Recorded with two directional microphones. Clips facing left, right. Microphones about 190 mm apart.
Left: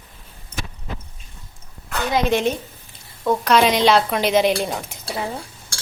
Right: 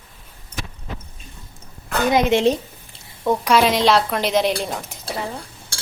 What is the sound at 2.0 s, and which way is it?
A woman's voice, 15° right (ahead or behind).